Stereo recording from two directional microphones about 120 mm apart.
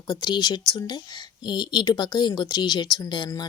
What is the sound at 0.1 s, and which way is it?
Speech, 35° left (ahead or behind).